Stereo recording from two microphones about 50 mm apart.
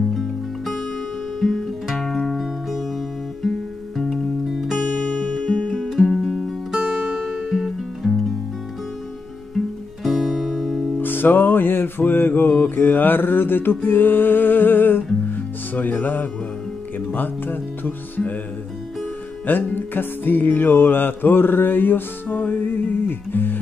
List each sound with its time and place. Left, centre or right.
0.1 s music: centre
3.4 s music: centre
6.8 s music: centre
9.6 s music: centre
11.0 s music: left
17.1 s speech: left
19.7 s music: left